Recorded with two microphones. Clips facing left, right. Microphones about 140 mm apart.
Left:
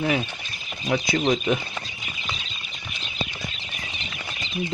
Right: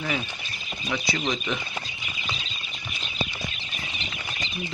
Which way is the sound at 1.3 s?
45° left (ahead or behind).